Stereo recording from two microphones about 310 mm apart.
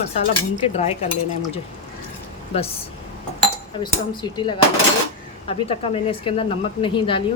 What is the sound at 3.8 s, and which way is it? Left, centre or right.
A woman's voice, centre.